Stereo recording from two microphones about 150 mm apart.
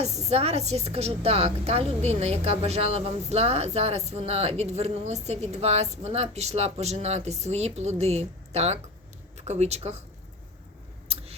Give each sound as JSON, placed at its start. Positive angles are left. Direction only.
{"t": 0.3, "sound": "a woman's voice", "side_deg": -45}